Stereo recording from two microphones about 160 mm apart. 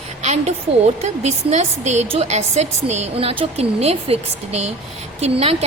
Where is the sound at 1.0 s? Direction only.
45° right (ahead or behind).